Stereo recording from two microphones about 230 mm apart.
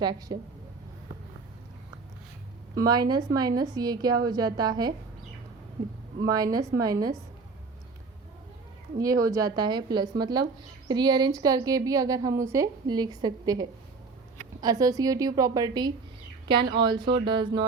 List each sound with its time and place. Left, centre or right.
0.0 s a woman's voice: centre
2.7 s a woman's voice: centre
6.2 s a woman's voice: centre
9.0 s a woman's voice: centre